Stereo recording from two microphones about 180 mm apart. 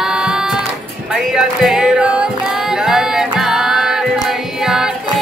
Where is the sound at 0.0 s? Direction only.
5° right (ahead or behind).